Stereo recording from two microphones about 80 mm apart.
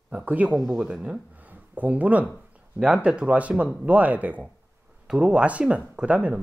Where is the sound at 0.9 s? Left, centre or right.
Centre.